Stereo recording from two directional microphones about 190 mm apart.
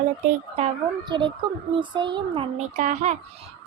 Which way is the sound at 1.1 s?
25° right (ahead or behind).